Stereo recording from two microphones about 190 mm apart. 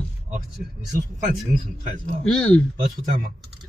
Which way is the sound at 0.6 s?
50° right (ahead or behind).